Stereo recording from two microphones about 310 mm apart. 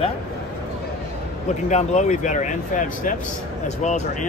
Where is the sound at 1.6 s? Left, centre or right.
Left.